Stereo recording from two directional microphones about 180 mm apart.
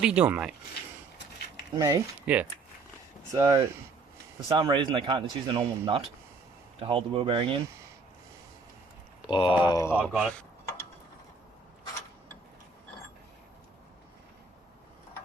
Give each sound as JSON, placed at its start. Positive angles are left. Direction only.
{"t": 0.0, "sound": "speech", "side_deg": -5}
{"t": 1.7, "sound": "a man's voice", "side_deg": -20}
{"t": 2.2, "sound": "speech", "side_deg": -10}
{"t": 3.3, "sound": "a man's voice", "side_deg": -20}
{"t": 9.3, "sound": "speech", "side_deg": 25}
{"t": 9.9, "sound": "speech", "side_deg": -5}